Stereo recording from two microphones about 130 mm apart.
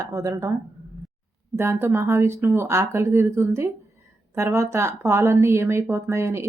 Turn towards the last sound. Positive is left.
turn(degrees=-20)  # may be behind; listen again after turning